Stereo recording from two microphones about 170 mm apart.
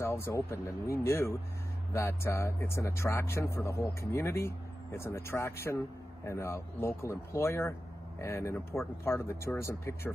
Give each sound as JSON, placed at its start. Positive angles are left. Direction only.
{"t": 0.0, "sound": "speech", "side_deg": 15}